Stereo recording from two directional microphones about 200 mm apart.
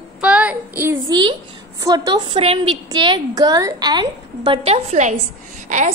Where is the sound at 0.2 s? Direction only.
5° right (ahead or behind).